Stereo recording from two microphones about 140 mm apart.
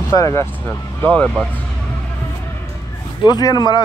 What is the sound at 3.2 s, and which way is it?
Speech, 30° left (ahead or behind).